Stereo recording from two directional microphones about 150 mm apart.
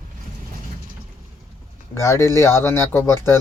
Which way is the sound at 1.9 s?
20° left (ahead or behind).